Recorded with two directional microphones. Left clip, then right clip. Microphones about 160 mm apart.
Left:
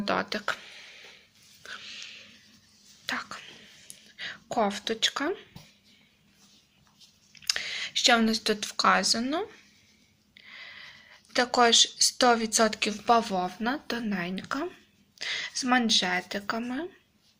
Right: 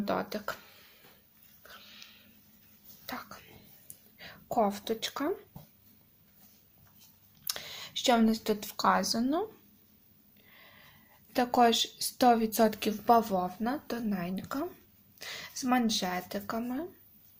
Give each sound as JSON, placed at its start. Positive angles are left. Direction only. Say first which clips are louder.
{"t": 0.0, "sound": "speech", "louder": "left 4 dB", "side_deg": 0}
{"t": 1.6, "sound": "dog", "louder": "left 10 dB", "side_deg": 5}
{"t": 3.1, "sound": "whispering", "louder": "left 9 dB", "side_deg": 0}
{"t": 4.2, "sound": "speech", "louder": "left 2 dB", "side_deg": -5}
{"t": 7.4, "sound": "a sound", "louder": "left 9 dB", "side_deg": -10}
{"t": 9.2, "sound": "speech", "louder": "left 1 dB", "side_deg": -10}
{"t": 10.3, "sound": "a sound", "louder": "left 12 dB", "side_deg": -15}
{"t": 13.1, "sound": "speech", "louder": "left 1 dB", "side_deg": -20}
{"t": 13.4, "sound": "speech", "louder": "left 3 dB", "side_deg": 0}